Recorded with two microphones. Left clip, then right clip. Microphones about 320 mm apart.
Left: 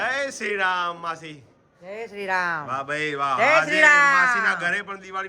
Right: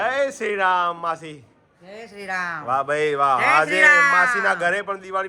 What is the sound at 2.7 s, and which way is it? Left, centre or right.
A man's voice, centre.